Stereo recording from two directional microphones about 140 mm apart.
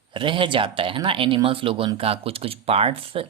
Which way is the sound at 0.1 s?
35° right (ahead or behind).